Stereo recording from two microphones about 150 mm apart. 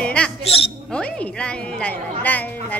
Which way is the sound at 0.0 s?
10° left (ahead or behind).